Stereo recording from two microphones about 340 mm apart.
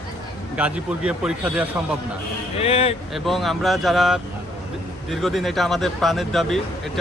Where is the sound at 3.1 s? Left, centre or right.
Centre.